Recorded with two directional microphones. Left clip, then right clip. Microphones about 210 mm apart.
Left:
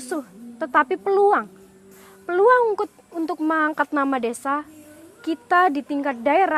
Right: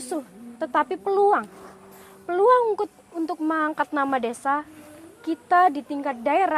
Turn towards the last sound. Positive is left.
turn(degrees=30)  # may be behind; listen again after turning